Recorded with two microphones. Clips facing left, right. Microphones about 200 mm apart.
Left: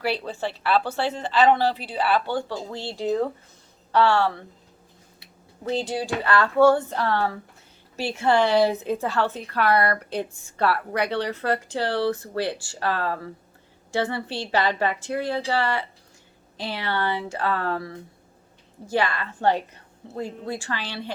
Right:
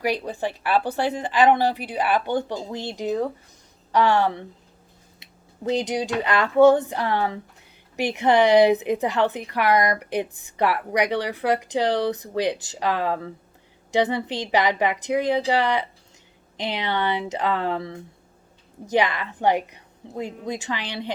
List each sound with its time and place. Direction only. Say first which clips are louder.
0.0 s speech: right 2 dB; 15° right (ahead or behind)